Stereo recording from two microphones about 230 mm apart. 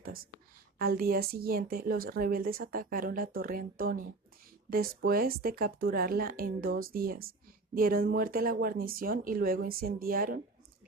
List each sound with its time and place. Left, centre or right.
0.8 s a woman's voice: right